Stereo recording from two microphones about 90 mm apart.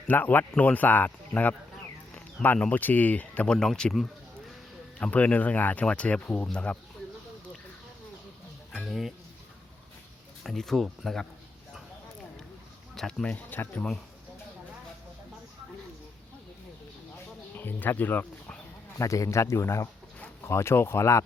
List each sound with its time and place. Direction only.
0.1 s speech: 20° left (ahead or behind)
8.8 s speech: centre (ahead or behind)
10.4 s speech: 5° left (ahead or behind)
13.0 s speech: 5° left (ahead or behind)
13.2 s speech: 20° left (ahead or behind)
17.6 s speech: 20° left (ahead or behind)
18.9 s speech: 35° left (ahead or behind)